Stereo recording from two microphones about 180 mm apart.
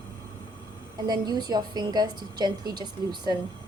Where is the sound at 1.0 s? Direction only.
20° right (ahead or behind).